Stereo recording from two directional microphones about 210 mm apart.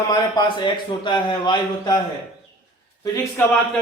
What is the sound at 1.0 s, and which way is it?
Speech, 20° left (ahead or behind).